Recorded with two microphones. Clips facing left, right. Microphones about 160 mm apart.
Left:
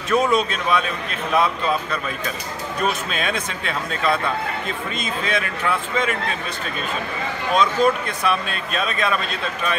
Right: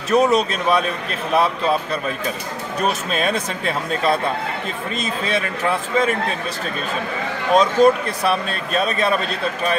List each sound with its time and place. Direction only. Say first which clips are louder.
0.1 s speech: right 3 dB; 35° right (ahead or behind)
7.5 s speech: right 4 dB; 35° right (ahead or behind)